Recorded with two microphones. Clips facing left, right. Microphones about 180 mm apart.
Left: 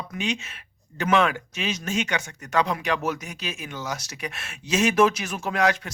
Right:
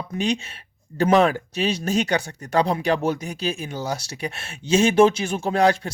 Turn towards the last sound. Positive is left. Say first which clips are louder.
# right 4 dB
turn(degrees=-30)  # may be behind; listen again after turning